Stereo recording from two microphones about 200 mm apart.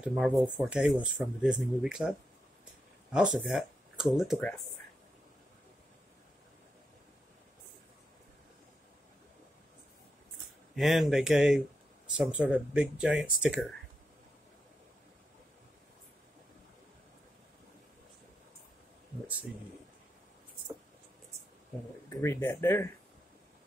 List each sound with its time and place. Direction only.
0.0 s speech: 5° right (ahead or behind)
10.8 s speech: centre (ahead or behind)
22.1 s speech: 10° left (ahead or behind)